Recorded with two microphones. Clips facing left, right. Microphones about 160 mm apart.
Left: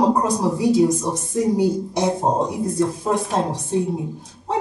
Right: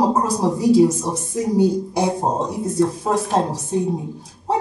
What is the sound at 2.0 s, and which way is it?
Speech, centre (ahead or behind).